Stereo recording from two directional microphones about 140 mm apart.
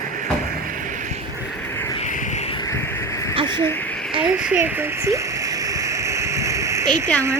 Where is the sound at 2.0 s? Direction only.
55° left (ahead or behind).